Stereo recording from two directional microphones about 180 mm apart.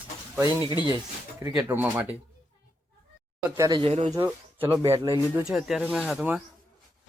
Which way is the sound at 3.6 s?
25° right (ahead or behind).